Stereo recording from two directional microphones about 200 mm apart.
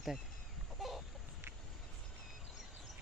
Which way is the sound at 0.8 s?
Centre (ahead or behind).